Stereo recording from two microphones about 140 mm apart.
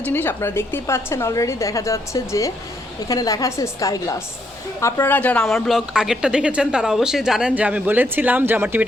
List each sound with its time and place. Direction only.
0.0 s a woman's voice: 15° left (ahead or behind); by 8.8 s 15° right (ahead or behind)